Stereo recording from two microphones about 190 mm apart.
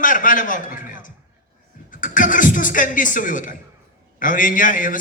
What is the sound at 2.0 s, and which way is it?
A man's voice, 45° left (ahead or behind).